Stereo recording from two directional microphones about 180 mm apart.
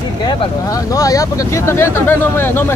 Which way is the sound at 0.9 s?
20° left (ahead or behind).